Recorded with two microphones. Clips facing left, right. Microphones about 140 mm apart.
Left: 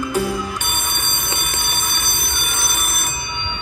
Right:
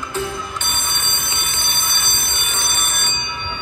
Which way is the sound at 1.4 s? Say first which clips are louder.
Left 2 dB; 45° left (ahead or behind).